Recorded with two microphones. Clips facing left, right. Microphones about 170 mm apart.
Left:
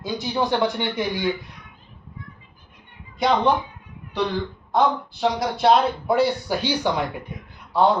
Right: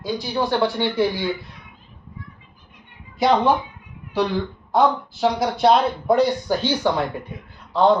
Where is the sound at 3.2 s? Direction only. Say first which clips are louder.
Right 3 dB; centre (ahead or behind).